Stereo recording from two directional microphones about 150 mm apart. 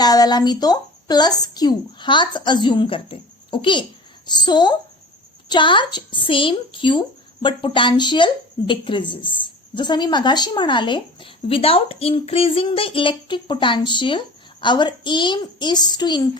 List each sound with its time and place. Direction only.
0.0 s a woman's voice: 25° left (ahead or behind)